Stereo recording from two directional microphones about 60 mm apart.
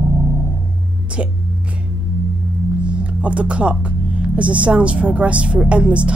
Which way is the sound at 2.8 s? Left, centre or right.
Centre.